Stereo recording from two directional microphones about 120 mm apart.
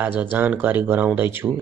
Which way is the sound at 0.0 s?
15° right (ahead or behind).